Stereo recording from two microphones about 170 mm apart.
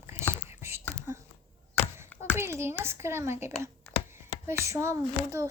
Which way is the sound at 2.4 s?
15° right (ahead or behind).